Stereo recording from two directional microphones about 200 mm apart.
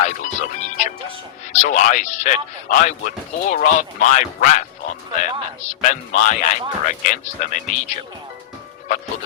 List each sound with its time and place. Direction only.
0.0 s music: 40° left (ahead or behind)
1.5 s speech: 40° left (ahead or behind)